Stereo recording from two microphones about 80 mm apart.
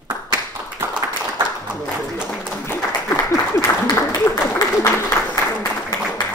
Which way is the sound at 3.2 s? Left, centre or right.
Left.